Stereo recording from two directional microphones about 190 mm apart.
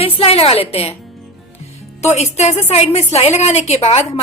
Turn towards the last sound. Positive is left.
turn(degrees=35)  # may be behind; listen again after turning